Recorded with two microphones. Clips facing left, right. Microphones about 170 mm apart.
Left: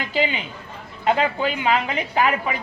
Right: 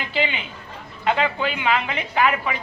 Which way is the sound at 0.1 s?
40° left (ahead or behind).